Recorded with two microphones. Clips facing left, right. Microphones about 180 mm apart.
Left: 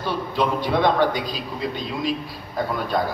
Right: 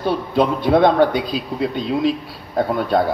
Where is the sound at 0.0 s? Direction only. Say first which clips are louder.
Right 5 dB; 55° right (ahead or behind).